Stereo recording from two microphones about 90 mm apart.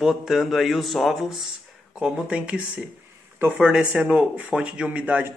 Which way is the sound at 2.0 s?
10° right (ahead or behind).